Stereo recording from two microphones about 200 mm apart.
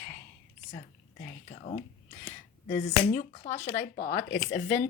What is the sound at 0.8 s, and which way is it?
Speech, 35° left (ahead or behind).